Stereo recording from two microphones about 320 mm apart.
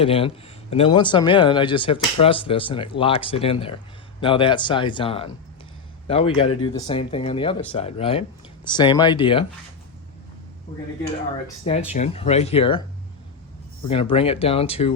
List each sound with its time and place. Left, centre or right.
0.0 s speech: centre
11.0 s speech: centre
13.8 s speech: centre